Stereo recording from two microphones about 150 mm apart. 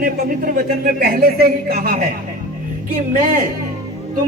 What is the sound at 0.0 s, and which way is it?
A man's voice, 70° right (ahead or behind).